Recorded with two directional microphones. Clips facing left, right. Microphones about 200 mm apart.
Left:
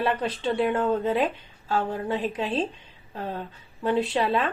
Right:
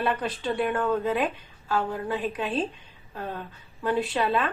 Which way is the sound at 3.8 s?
25° left (ahead or behind).